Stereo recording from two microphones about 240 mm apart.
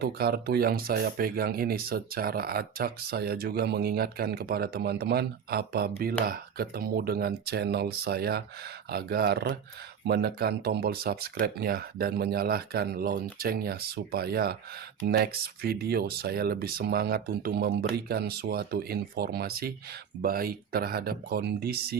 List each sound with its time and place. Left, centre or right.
0.0 s speech: right